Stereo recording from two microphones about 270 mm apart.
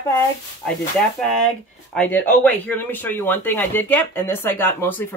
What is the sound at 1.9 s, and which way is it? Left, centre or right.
A man's voice, centre.